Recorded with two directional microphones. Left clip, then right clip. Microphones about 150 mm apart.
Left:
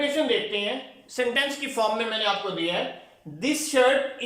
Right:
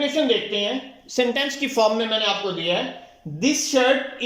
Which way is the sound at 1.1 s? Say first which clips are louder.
Right 3 dB; 25° right (ahead or behind).